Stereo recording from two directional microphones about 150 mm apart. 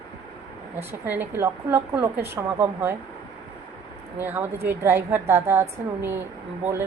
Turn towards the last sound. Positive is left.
turn(degrees=-15)  # may be behind; listen again after turning